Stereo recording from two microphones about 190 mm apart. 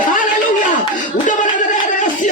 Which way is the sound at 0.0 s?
45° left (ahead or behind).